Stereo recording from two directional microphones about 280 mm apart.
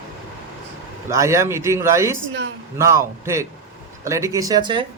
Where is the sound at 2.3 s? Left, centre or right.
Right.